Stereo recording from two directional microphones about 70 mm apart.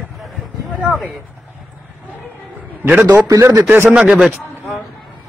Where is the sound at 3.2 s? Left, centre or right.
Right.